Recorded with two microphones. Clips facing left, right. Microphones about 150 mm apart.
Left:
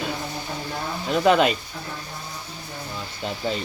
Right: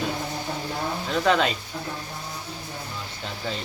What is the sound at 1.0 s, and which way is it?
Speech, 10° left (ahead or behind).